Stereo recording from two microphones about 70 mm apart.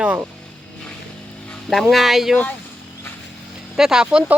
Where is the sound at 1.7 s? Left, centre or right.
Centre.